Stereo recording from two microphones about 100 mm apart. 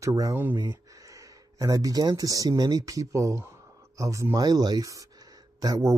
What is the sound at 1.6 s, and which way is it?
Speech, 35° right (ahead or behind).